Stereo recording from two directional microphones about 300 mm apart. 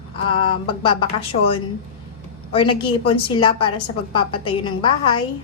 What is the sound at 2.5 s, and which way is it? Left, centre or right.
Speech, centre.